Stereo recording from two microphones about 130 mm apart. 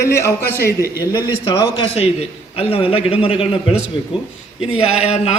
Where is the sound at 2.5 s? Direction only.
45° left (ahead or behind).